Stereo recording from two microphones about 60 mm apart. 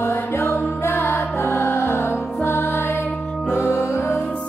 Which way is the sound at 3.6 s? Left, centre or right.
Left.